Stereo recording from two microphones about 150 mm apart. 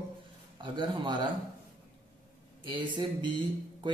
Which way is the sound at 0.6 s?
30° right (ahead or behind).